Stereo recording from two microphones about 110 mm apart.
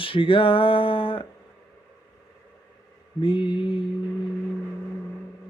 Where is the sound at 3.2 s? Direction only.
50° left (ahead or behind).